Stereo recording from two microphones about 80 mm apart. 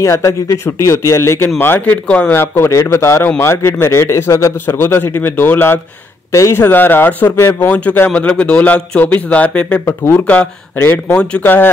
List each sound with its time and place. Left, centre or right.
0.0 s a man's voice: left
2.0 s a man's voice: centre
2.3 s a man's voice: left
4.6 s a man's voice: left
6.3 s a man's voice: left
6.6 s a man's voice: left
9.8 s a man's voice: left
10.2 s a man's voice: centre